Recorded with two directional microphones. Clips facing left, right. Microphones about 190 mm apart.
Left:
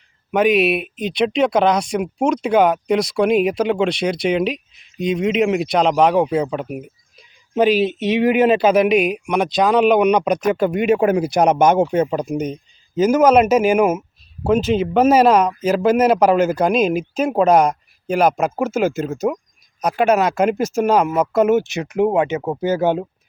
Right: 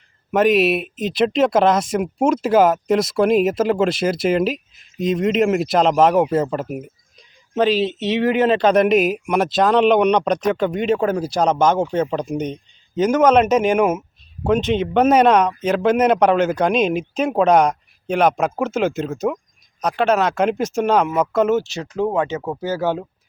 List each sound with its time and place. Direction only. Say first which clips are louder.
0.3 s speech: even; centre (ahead or behind)
7.5 s speech: left 2 dB; 10° left (ahead or behind)